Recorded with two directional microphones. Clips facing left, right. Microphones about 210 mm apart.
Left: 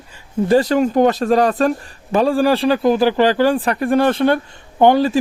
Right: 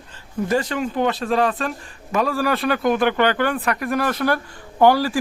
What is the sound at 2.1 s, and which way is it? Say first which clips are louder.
Speech: left 6 dB; 30° left (ahead or behind).